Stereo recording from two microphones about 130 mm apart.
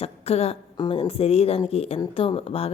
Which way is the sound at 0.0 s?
55° left (ahead or behind).